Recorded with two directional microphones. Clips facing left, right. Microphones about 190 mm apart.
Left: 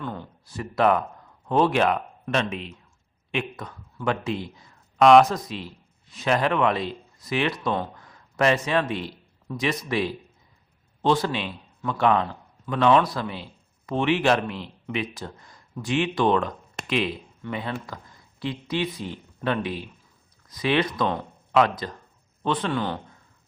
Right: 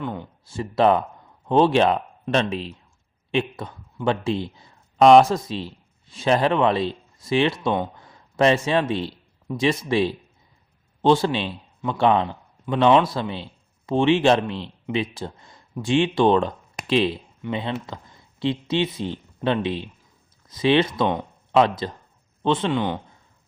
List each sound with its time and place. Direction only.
0.0 s a man's voice: 15° right (ahead or behind)